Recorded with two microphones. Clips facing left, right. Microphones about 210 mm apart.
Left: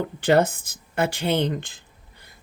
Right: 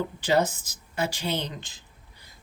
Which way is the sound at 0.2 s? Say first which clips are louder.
Left 5 dB; 55° left (ahead or behind).